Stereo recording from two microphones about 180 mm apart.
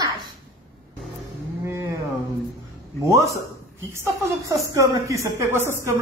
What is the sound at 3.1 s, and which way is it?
Speech, 15° right (ahead or behind).